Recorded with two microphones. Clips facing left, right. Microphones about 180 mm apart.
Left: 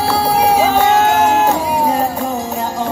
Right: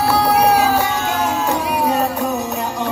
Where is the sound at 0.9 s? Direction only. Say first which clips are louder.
Left 7 dB; 75° left (ahead or behind).